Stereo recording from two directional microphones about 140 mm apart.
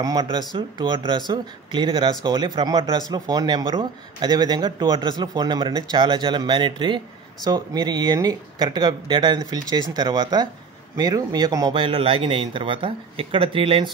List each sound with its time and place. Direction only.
0.0 s speech: 30° right (ahead or behind)